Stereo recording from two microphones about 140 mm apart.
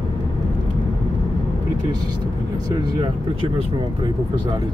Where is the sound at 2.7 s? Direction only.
35° right (ahead or behind).